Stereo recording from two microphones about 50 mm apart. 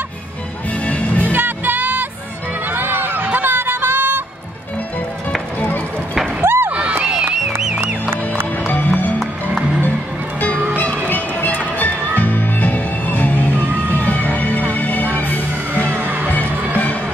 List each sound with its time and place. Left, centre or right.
0.8 s music: left
1.2 s music: right
2.7 s a sound: right
6.4 s a sound: right
6.7 s crowd: right
7.8 s music: right
8.6 s music: left
11.1 s music: left
15.9 s music: right